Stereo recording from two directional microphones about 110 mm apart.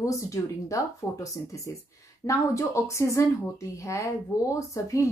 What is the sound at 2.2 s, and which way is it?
Speech, 30° left (ahead or behind).